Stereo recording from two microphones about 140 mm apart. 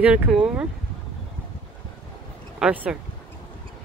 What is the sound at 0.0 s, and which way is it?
Speech, 5° right (ahead or behind).